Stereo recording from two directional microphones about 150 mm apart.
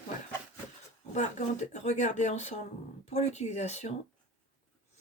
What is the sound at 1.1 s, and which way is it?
Speech, 50° left (ahead or behind).